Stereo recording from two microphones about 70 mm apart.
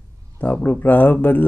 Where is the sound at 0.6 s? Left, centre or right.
Left.